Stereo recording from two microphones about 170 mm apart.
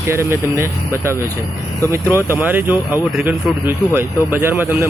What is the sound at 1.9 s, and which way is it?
Speech, 15° right (ahead or behind).